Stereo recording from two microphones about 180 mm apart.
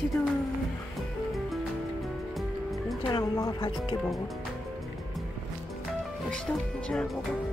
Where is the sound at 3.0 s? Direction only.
25° left (ahead or behind).